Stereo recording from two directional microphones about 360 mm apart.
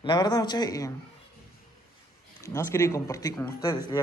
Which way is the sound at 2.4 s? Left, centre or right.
Centre.